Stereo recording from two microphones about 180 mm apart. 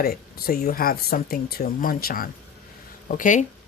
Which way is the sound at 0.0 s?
55° left (ahead or behind).